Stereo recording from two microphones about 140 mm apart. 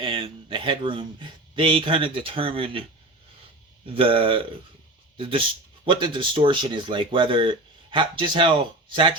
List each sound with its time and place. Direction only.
0.0 s speech: 35° right (ahead or behind)
3.8 s speech: 40° right (ahead or behind)